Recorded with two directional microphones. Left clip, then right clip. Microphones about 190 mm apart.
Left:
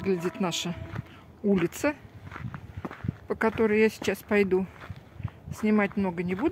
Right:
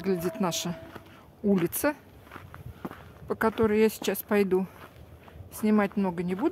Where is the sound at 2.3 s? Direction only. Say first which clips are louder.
Left 4 dB; 25° left (ahead or behind).